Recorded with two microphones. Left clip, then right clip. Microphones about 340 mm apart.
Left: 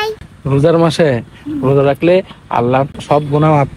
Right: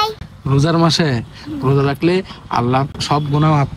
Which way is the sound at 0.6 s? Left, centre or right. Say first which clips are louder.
Left 5 dB; centre.